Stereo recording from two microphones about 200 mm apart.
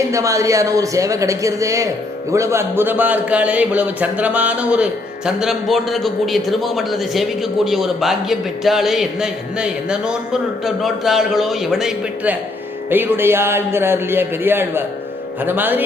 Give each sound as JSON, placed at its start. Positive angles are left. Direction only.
{"t": 0.1, "sound": "a man's voice", "side_deg": -15}